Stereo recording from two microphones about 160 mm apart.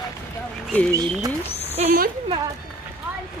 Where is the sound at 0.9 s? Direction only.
25° right (ahead or behind).